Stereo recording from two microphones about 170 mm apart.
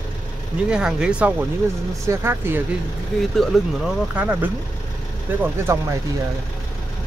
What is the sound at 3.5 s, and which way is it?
Speech, centre (ahead or behind).